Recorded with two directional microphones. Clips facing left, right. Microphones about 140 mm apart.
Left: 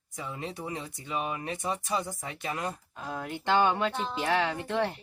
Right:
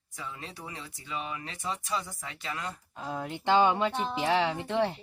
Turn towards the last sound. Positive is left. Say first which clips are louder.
# right 1 dB
turn(degrees=-15)  # may be behind; listen again after turning